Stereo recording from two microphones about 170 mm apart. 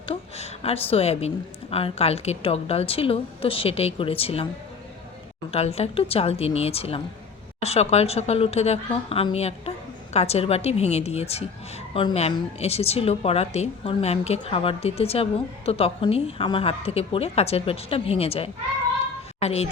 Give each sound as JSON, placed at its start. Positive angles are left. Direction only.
{"t": 0.0, "sound": "a sound", "side_deg": 35}
{"t": 1.7, "sound": "a woman's voice", "side_deg": 35}
{"t": 5.5, "sound": "a woman's voice", "side_deg": 35}